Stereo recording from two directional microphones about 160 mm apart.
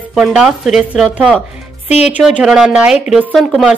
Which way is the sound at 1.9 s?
40° left (ahead or behind).